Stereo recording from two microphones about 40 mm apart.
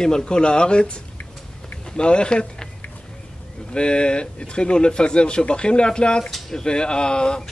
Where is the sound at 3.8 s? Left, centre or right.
Left.